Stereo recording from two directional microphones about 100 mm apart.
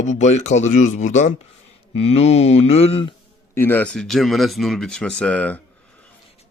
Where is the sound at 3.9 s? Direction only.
5° left (ahead or behind).